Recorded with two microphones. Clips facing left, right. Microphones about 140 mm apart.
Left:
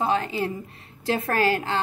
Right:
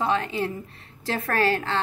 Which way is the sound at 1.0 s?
15° left (ahead or behind).